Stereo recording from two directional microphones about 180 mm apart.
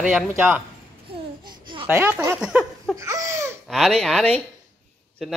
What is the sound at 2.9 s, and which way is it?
Speech, 20° right (ahead or behind).